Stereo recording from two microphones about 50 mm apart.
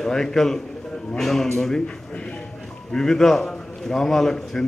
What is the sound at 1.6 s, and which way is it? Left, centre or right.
A man's voice, centre.